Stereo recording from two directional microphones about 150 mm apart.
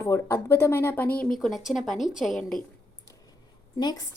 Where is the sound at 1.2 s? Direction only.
Centre (ahead or behind).